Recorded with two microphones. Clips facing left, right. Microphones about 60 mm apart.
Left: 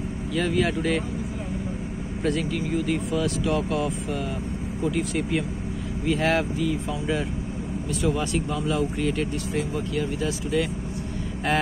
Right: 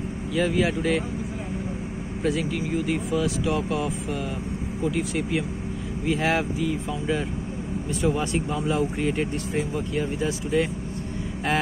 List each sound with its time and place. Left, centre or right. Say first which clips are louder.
0.3 s speech: right 1 dB; centre
2.2 s speech: even; centre
8.0 s speech: right 1 dB; right